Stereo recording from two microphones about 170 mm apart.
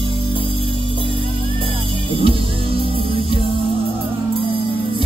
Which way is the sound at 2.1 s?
35° right (ahead or behind).